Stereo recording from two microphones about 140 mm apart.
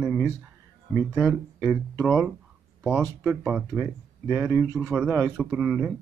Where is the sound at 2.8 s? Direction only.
20° right (ahead or behind).